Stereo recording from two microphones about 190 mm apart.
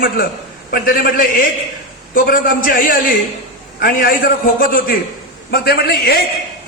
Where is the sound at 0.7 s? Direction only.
50° left (ahead or behind).